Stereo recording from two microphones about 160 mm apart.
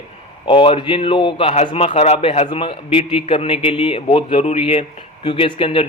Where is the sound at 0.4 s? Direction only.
30° left (ahead or behind).